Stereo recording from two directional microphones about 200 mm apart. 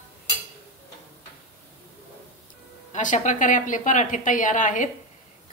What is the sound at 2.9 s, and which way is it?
A woman's voice, 40° left (ahead or behind).